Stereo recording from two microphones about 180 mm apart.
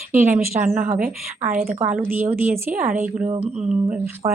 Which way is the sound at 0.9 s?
50° right (ahead or behind).